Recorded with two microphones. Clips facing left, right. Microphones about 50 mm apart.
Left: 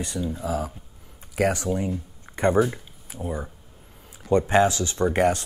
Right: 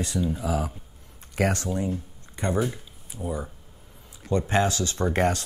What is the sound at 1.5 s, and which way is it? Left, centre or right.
Speech, centre.